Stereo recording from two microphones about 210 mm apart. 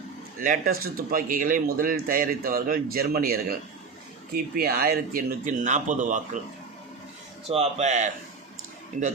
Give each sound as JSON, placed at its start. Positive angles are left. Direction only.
{"t": 0.3, "sound": "a man's voice", "side_deg": -40}
{"t": 7.4, "sound": "a man's voice", "side_deg": -30}